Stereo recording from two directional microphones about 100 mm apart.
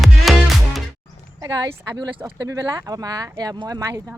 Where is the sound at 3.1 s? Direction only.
35° right (ahead or behind).